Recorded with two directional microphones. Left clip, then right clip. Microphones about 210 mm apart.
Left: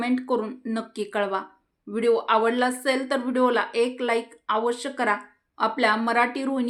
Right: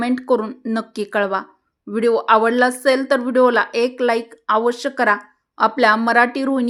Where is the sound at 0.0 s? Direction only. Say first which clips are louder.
Right 7 dB; 40° right (ahead or behind).